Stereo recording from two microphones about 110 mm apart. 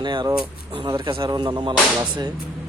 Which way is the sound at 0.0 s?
45° right (ahead or behind).